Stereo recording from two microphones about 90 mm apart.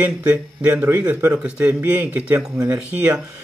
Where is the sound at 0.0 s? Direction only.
15° right (ahead or behind).